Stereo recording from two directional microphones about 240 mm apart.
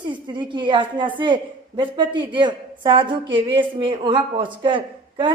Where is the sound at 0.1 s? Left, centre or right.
Centre.